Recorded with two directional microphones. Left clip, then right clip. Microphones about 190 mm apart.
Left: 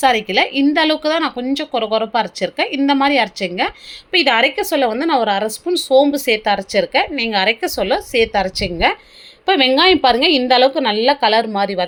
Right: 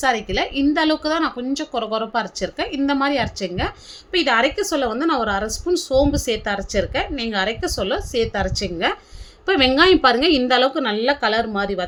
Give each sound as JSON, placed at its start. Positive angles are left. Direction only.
{"t": 0.0, "sound": "a woman's voice", "side_deg": 15}
{"t": 9.5, "sound": "a woman's voice", "side_deg": 0}